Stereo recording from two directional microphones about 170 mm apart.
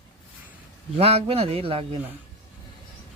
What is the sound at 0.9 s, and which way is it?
A man's voice, 35° right (ahead or behind).